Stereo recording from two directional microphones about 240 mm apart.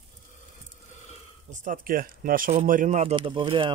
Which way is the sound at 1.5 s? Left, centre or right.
Right.